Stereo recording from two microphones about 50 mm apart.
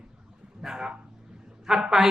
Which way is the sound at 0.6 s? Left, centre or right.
Centre.